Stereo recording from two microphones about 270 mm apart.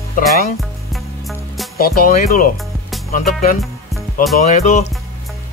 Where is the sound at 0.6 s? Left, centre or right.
Centre.